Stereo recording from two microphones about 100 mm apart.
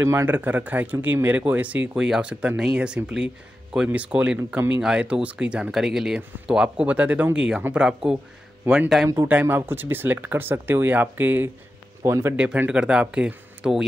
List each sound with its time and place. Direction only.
0.0 s speech: 25° right (ahead or behind); by 9.1 s 5° right (ahead or behind)
9.3 s speech: 20° right (ahead or behind)
12.4 s speech: 15° right (ahead or behind)